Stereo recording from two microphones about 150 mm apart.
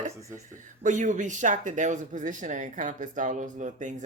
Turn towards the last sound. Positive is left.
turn(degrees=-55)  # may be behind; listen again after turning